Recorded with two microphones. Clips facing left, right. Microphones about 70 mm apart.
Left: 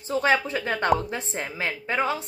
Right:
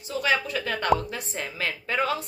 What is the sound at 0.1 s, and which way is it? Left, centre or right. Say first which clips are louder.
A woman's voice: left 3 dB; left.